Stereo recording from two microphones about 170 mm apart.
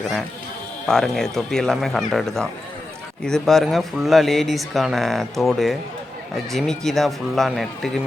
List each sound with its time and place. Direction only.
0.9 s speech: centre (ahead or behind)